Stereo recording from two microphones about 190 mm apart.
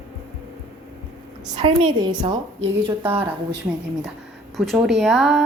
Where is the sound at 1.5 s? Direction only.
25° right (ahead or behind).